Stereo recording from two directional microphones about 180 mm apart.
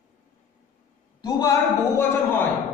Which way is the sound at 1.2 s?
20° left (ahead or behind).